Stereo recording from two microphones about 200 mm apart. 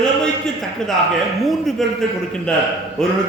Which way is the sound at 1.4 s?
Centre (ahead or behind).